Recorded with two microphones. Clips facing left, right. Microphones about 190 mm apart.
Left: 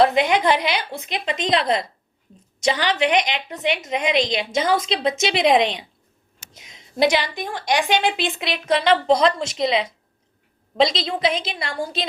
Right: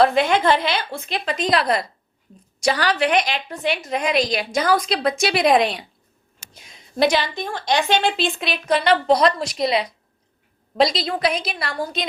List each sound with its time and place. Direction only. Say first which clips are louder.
0.0 s a woman's voice: even; 20° left (ahead or behind)